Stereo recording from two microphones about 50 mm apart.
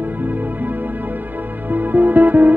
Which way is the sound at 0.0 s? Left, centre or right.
Right.